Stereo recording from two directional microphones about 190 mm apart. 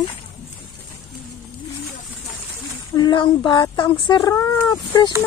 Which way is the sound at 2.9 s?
25° left (ahead or behind).